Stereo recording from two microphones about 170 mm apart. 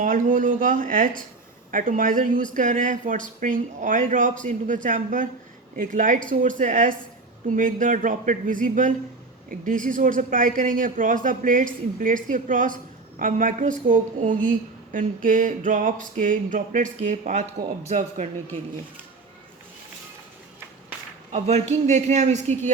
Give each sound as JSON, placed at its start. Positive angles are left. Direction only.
{"t": 0.0, "sound": "a man's voice", "side_deg": -50}
{"t": 21.3, "sound": "a man's voice", "side_deg": -40}